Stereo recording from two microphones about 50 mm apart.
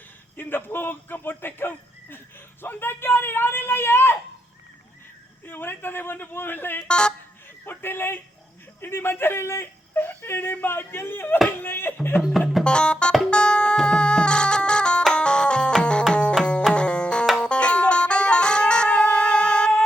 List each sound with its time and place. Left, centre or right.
0.3 s speech: left
5.5 s a woman's voice: left
6.8 s speech: centre
7.6 s a woman's voice: left
11.4 s a sound: left
12.6 s music: centre